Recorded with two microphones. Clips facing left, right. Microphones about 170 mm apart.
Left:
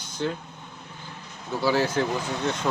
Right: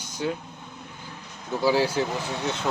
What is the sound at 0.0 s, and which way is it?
Vehicle, 10° right (ahead or behind).